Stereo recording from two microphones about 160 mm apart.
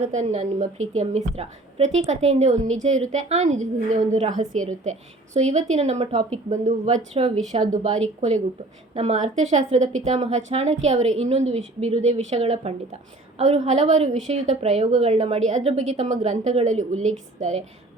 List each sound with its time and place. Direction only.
0.0 s a woman's voice: 45° right (ahead or behind)